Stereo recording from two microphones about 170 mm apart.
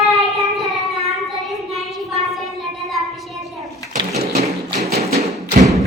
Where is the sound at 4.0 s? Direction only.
40° right (ahead or behind).